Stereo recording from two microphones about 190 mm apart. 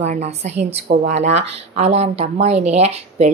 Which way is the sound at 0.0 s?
35° right (ahead or behind).